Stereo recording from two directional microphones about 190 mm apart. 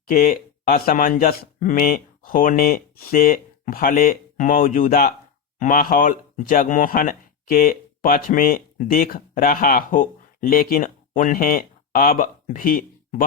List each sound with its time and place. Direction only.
0.1 s speech: 50° left (ahead or behind)